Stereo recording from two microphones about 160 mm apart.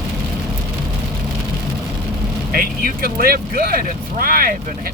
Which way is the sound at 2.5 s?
60° right (ahead or behind).